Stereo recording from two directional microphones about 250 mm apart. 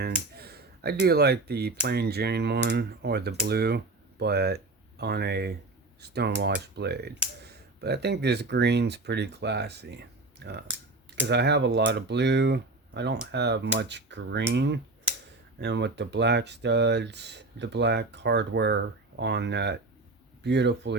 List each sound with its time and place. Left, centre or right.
0.3 s speech: right